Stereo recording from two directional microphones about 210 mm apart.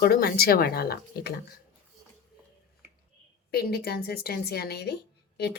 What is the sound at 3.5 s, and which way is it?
Speech, 50° left (ahead or behind).